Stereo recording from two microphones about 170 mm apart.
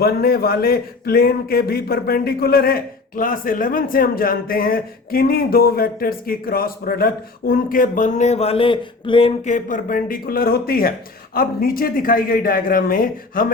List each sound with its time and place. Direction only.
0.0 s a man's voice: 65° left (ahead or behind); by 9.3 s 30° left (ahead or behind)
9.4 s a man's voice: 50° left (ahead or behind)